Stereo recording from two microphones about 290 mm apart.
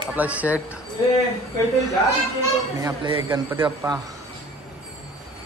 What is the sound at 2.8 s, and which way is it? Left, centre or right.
Speech, centre.